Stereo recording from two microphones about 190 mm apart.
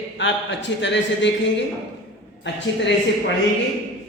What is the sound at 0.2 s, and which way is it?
A man's voice, 70° left (ahead or behind).